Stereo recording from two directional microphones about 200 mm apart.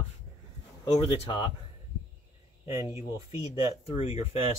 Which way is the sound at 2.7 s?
15° right (ahead or behind).